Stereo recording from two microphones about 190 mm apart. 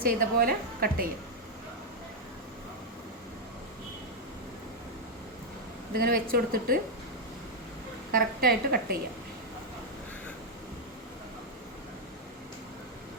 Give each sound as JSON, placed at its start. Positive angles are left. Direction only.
{"t": 0.0, "sound": "a woman's voice", "side_deg": -50}
{"t": 5.9, "sound": "a woman's voice", "side_deg": -55}
{"t": 8.1, "sound": "a woman's voice", "side_deg": -55}